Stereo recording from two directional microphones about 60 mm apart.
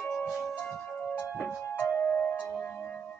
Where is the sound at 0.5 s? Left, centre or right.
Centre.